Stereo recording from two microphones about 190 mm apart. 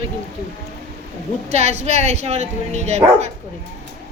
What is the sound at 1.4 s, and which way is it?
Speech, 35° right (ahead or behind).